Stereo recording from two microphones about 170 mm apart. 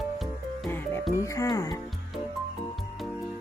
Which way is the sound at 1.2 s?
20° left (ahead or behind).